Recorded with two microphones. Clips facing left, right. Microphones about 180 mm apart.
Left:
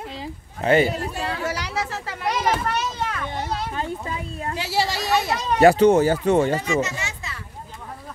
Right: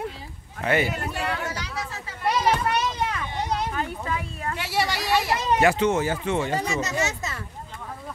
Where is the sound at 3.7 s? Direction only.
25° left (ahead or behind).